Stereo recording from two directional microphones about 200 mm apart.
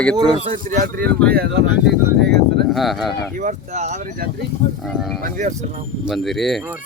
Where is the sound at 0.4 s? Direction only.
40° right (ahead or behind).